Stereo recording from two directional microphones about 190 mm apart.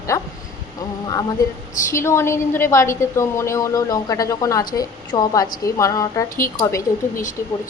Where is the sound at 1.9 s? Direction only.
15° left (ahead or behind).